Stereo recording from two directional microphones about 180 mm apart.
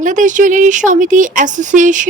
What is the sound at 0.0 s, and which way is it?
A woman's voice, 45° right (ahead or behind).